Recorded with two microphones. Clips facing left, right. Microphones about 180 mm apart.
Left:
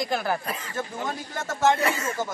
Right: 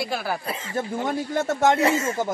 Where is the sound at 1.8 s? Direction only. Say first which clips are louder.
Right 5 dB; 30° right (ahead or behind).